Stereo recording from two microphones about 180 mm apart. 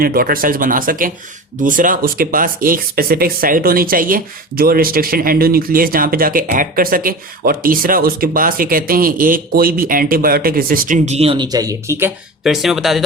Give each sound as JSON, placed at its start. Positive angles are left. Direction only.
{"t": 0.0, "sound": "speech", "side_deg": -55}
{"t": 12.4, "sound": "speech", "side_deg": 0}